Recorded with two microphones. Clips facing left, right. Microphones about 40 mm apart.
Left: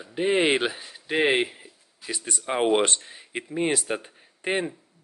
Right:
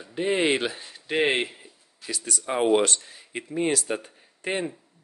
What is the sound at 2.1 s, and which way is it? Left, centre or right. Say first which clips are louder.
Speech: even; left.